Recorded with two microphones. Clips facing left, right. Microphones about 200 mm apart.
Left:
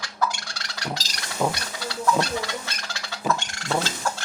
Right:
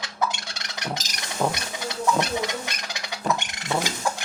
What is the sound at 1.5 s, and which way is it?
Chicken, 20° right (ahead or behind).